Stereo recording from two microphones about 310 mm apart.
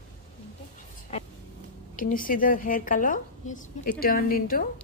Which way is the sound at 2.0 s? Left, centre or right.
Left.